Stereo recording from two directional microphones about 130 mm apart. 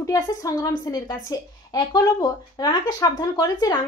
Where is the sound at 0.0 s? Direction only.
25° left (ahead or behind).